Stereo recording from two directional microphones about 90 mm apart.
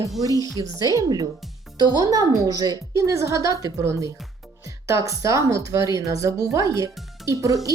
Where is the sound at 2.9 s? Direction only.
35° right (ahead or behind).